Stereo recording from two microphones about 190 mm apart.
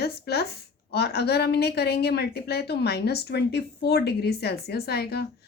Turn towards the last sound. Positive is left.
turn(degrees=60)  # may be behind; listen again after turning